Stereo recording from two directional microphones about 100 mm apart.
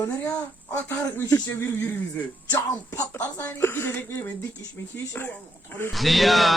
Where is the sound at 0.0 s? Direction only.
25° left (ahead or behind).